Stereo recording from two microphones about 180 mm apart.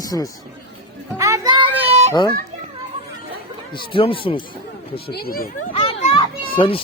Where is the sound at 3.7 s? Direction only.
30° left (ahead or behind).